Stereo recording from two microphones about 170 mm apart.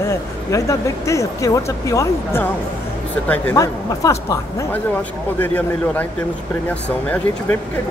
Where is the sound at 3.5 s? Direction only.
20° left (ahead or behind).